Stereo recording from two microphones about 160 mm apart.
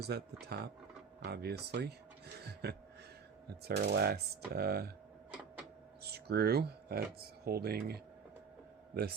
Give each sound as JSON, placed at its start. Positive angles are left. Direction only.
{"t": 0.0, "sound": "speech", "side_deg": -90}
{"t": 5.3, "sound": "printer", "side_deg": -10}
{"t": 6.0, "sound": "speech", "side_deg": -85}